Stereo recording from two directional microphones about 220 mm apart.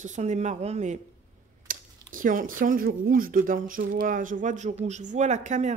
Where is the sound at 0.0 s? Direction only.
30° right (ahead or behind).